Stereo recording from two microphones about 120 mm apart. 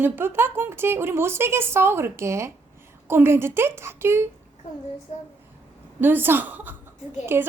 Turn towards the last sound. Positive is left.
turn(degrees=-20)  # may be behind; listen again after turning